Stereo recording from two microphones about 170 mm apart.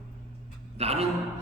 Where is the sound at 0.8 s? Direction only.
35° right (ahead or behind).